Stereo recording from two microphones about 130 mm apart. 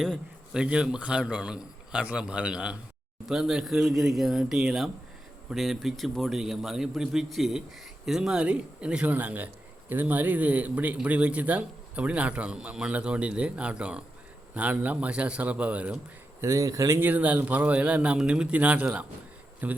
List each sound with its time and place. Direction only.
0.0 s a man's voice: centre (ahead or behind)
16.4 s speech: 25° right (ahead or behind)
17.0 s speech: 10° right (ahead or behind)